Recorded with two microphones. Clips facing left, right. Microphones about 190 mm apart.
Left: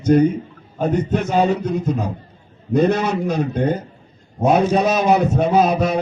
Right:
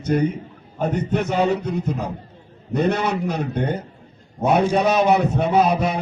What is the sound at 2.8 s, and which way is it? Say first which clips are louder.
A man's voice: left 3 dB; 60° right (ahead or behind).